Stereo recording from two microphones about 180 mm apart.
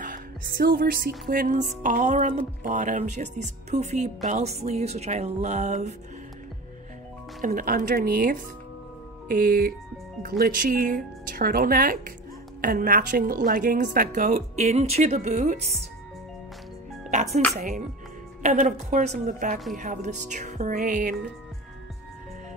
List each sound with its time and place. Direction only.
0.0 s speech: 55° right (ahead or behind)
7.4 s a woman's voice: 50° right (ahead or behind)
17.3 s a woman's voice: centre (ahead or behind)
17.6 s a woman's voice: 45° right (ahead or behind)